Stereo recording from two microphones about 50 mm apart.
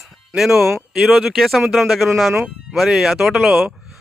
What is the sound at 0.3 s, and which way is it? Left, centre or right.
A man's voice, centre.